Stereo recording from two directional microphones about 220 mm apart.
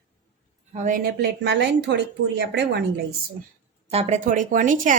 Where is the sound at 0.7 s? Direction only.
35° right (ahead or behind); by 2.8 s 50° right (ahead or behind).